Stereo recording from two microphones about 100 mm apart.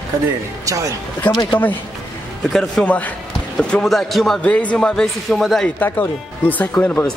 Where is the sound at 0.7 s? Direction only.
35° right (ahead or behind).